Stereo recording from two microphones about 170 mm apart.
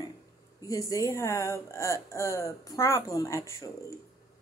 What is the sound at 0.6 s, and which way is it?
Speech, 20° left (ahead or behind).